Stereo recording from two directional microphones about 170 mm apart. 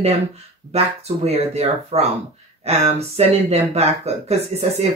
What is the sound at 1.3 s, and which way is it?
Speech, 35° right (ahead or behind).